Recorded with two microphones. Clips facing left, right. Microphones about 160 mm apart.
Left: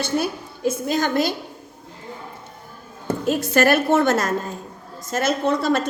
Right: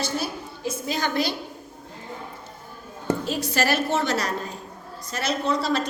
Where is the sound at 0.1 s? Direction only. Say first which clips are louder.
Left 10 dB; 60° left (ahead or behind).